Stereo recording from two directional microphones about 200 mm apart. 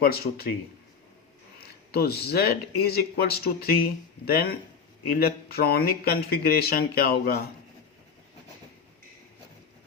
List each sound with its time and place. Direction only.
0.0 s speech: 50° left (ahead or behind)
1.6 s speech: 50° left (ahead or behind)